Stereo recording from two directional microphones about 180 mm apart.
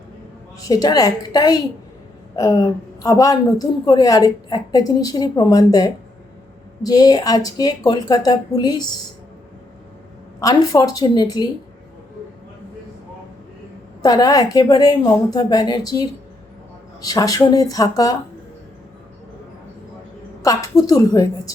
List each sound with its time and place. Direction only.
0.6 s a woman's voice: 20° left (ahead or behind)
10.4 s a woman's voice: 20° left (ahead or behind)
14.0 s a woman's voice: 20° left (ahead or behind)
20.4 s a woman's voice: 20° left (ahead or behind)